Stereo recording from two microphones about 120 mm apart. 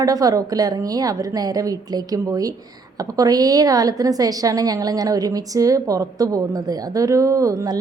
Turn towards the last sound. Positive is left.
turn(degrees=-30)  # may be behind; listen again after turning